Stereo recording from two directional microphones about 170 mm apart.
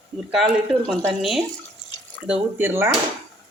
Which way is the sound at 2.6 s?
15° right (ahead or behind).